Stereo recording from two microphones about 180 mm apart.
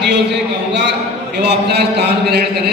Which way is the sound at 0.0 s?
75° right (ahead or behind).